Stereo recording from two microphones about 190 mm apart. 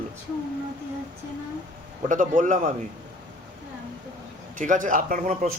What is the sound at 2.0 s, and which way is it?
Speech, 40° right (ahead or behind).